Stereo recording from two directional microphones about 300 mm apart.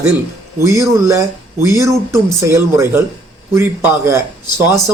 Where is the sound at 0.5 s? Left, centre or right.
Centre.